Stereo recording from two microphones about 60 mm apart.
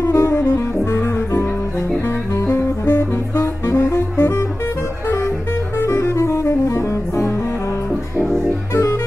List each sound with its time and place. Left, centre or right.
0.0 s music: left
2.4 s saxophone: left
5.8 s saxophone: left